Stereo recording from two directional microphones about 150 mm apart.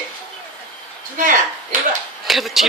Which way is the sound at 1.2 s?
60° right (ahead or behind).